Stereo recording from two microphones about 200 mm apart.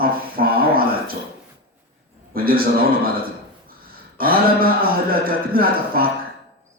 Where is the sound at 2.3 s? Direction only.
45° right (ahead or behind).